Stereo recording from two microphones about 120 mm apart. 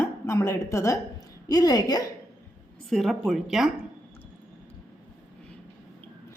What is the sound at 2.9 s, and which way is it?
Speech, centre (ahead or behind).